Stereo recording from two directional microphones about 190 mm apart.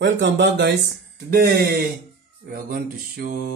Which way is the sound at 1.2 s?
55° right (ahead or behind).